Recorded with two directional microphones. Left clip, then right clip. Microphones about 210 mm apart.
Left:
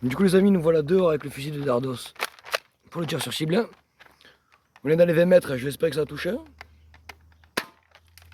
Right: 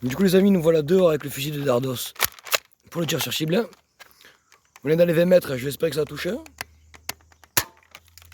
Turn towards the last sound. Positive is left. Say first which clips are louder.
# right 9 dB
turn(degrees=-55)  # may be behind; listen again after turning